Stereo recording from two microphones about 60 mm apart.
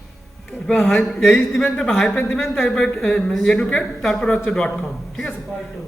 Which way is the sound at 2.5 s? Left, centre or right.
Centre.